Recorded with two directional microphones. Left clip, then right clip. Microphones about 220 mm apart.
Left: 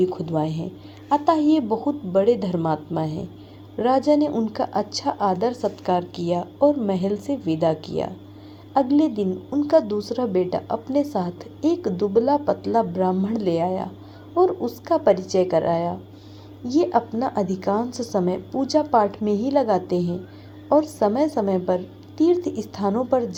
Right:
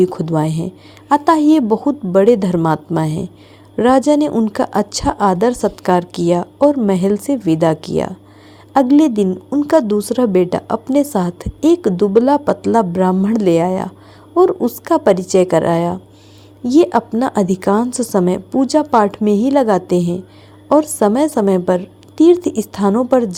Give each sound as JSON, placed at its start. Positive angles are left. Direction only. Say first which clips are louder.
{"t": 0.0, "sound": "a woman's voice", "louder": "right 7 dB", "side_deg": -45}